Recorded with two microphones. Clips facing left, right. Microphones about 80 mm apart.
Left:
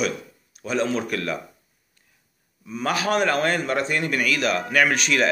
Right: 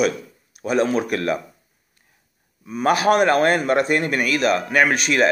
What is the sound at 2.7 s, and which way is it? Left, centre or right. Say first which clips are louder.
Speech: right 6 dB; right.